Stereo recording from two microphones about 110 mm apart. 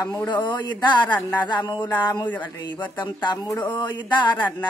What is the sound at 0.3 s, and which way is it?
Speech, 45° left (ahead or behind).